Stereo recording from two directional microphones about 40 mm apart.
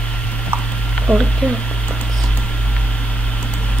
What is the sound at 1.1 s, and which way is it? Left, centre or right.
Speech, left.